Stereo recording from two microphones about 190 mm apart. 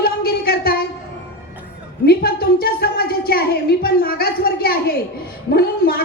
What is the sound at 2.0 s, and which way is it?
A woman's voice, 55° left (ahead or behind).